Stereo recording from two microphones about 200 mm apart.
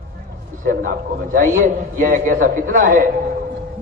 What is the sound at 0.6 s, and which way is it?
A man's voice, 40° right (ahead or behind).